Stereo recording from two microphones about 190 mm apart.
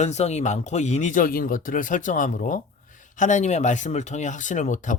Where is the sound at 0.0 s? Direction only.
35° left (ahead or behind).